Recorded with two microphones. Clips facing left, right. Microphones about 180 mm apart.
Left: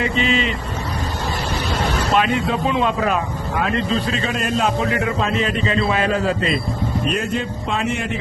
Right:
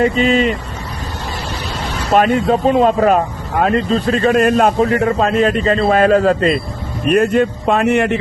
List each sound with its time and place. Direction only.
0.0 s speech: 45° right (ahead or behind)
2.1 s speech: 45° right (ahead or behind)
7.0 s a man's voice: 60° right (ahead or behind)